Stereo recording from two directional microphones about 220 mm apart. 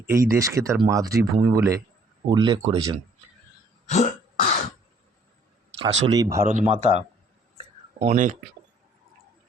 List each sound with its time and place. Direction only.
0.0 s speech: 10° right (ahead or behind)
3.8 s throat clearing: 35° left (ahead or behind)
5.8 s speech: 20° right (ahead or behind)
6.4 s speech: 30° right (ahead or behind)